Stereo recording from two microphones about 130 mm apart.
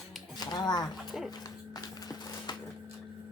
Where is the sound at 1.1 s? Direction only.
Centre (ahead or behind).